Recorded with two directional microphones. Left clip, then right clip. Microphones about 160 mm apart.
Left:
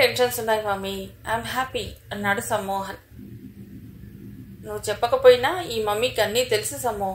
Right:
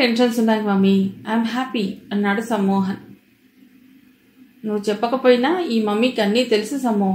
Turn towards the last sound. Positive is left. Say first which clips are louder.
# right 4 dB
turn(degrees=35)  # may be behind; listen again after turning